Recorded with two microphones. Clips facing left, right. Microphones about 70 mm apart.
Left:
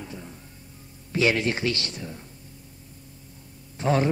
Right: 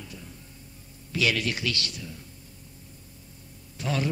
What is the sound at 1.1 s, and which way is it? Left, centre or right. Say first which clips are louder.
A man's voice: left 4 dB; left.